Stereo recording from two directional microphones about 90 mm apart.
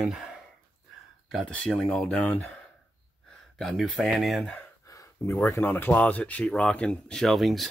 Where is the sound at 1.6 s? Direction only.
10° left (ahead or behind).